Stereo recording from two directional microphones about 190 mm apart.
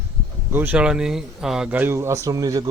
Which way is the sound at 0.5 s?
10° right (ahead or behind).